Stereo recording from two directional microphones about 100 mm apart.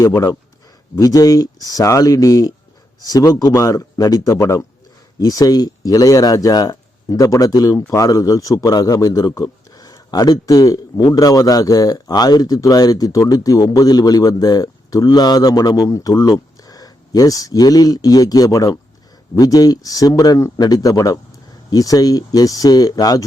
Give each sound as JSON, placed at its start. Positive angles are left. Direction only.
{"t": 0.0, "sound": "speech", "side_deg": 35}